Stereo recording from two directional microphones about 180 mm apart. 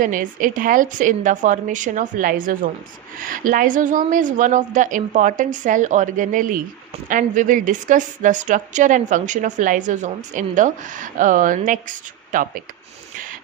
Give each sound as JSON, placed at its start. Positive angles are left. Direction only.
{"t": 0.0, "sound": "a woman's voice", "side_deg": -50}